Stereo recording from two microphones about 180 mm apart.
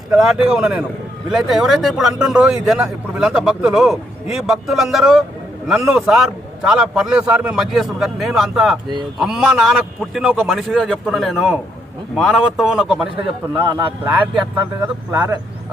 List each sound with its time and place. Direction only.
0.1 s a man's voice: 5° right (ahead or behind)
13.5 s a man's voice: 25° right (ahead or behind)
14.5 s speech: 10° right (ahead or behind)